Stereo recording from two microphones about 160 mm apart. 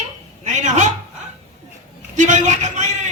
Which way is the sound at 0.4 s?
50° right (ahead or behind).